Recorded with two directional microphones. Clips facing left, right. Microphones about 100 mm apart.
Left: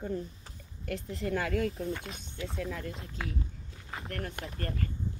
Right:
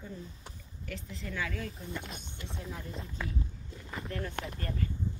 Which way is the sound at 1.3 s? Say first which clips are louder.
Left 7 dB; 55° left (ahead or behind).